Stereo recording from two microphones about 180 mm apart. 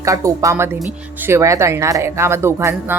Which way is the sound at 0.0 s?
15° right (ahead or behind).